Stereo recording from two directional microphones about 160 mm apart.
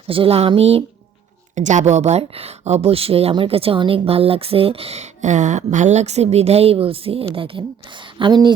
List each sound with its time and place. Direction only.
0.1 s speech: 35° right (ahead or behind)
1.5 s a woman's voice: 50° right (ahead or behind); by 8.5 s 25° right (ahead or behind)